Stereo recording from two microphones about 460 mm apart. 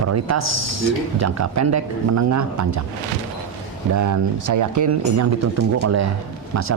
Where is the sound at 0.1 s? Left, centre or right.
Right.